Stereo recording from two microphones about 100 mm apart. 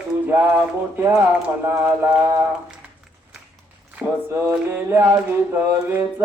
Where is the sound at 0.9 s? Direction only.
20° right (ahead or behind).